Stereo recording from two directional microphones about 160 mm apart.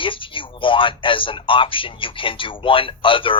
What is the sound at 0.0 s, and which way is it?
Speech, 30° left (ahead or behind).